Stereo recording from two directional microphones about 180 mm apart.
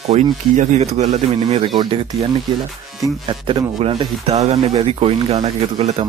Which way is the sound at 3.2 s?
30° right (ahead or behind).